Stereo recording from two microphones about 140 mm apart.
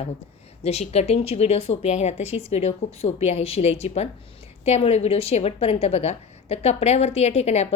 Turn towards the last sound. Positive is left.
turn(degrees=50)  # may be behind; listen again after turning